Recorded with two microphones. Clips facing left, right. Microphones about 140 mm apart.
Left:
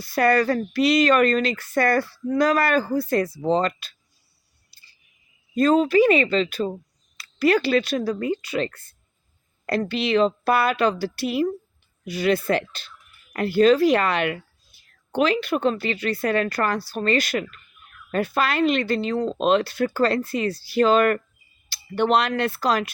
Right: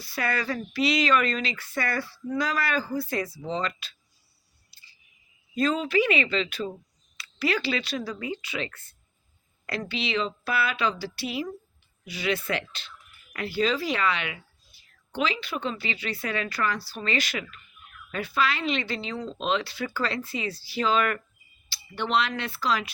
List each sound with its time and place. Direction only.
0.0 s speech: 45° left (ahead or behind)
4.7 s a sound: 40° left (ahead or behind)
5.5 s speech: 45° left (ahead or behind)